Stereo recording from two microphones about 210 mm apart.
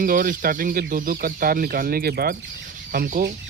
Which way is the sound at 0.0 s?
40° right (ahead or behind).